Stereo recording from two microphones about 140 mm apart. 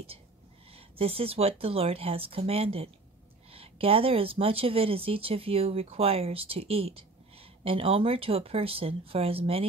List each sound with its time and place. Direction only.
0.7 s speech: 45° right (ahead or behind)